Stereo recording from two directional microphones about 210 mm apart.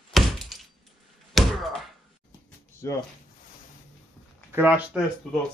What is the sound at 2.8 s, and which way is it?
Speech, 15° left (ahead or behind).